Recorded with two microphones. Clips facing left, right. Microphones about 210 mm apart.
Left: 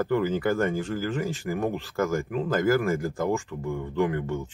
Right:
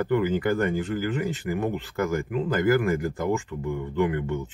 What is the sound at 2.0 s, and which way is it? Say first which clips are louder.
Speech: even; 45° left (ahead or behind).